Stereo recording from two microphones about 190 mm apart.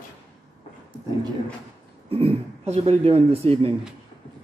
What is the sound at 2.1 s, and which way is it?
Speech, 30° right (ahead or behind).